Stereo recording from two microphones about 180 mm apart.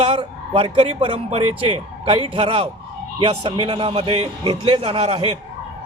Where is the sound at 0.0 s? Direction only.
35° right (ahead or behind).